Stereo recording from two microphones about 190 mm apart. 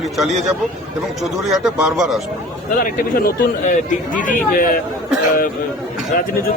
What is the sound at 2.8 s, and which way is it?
Speech, 50° left (ahead or behind).